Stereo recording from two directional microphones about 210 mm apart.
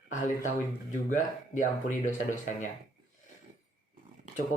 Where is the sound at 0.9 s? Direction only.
35° left (ahead or behind).